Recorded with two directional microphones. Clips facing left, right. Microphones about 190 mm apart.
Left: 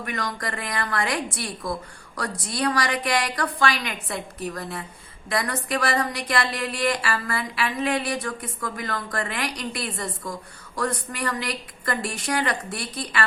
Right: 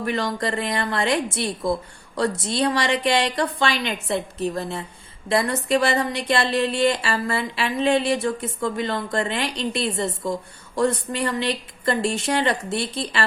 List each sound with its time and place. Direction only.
0.0 s speech: 30° right (ahead or behind)